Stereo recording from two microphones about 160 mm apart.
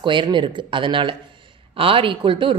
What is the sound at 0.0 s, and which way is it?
Speech, 30° right (ahead or behind).